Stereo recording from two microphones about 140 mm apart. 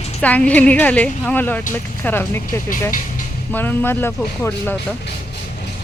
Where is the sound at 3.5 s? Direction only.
15° left (ahead or behind).